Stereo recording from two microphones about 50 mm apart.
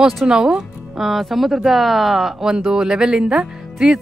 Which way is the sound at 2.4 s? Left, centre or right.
Centre.